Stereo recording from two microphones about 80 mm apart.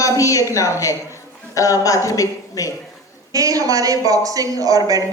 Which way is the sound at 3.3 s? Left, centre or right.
Right.